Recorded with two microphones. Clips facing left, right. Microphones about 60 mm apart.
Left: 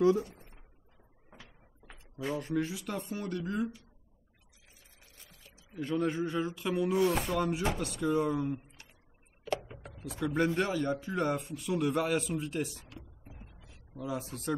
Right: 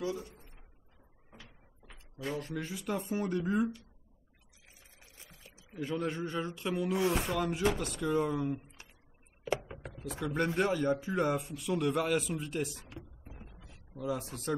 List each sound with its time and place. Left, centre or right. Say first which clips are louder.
0.0 s speech: left 11 dB; left
1.9 s speech: left 2 dB; centre
5.0 s music: right 2 dB; right
5.7 s speech: left 3 dB; centre
13.2 s a sound: right 1 dB; centre